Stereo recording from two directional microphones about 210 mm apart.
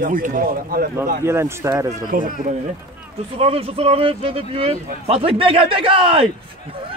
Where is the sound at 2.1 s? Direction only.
40° right (ahead or behind).